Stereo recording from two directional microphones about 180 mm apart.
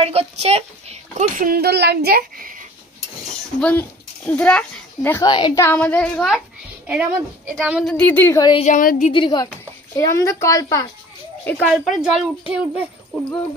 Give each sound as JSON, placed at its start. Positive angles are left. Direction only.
{"t": 0.0, "sound": "a child's voice", "side_deg": -35}
{"t": 3.6, "sound": "a child's voice", "side_deg": 5}
{"t": 5.2, "sound": "a woman's voice", "side_deg": 25}
{"t": 5.8, "sound": "a woman's voice", "side_deg": 5}
{"t": 6.9, "sound": "a woman's voice", "side_deg": -10}
{"t": 7.9, "sound": "a woman's voice", "side_deg": 10}
{"t": 8.5, "sound": "speech", "side_deg": 35}
{"t": 8.7, "sound": "a woman's voice", "side_deg": 45}
{"t": 9.1, "sound": "a woman's voice", "side_deg": 25}
{"t": 11.4, "sound": "a child's voice", "side_deg": 5}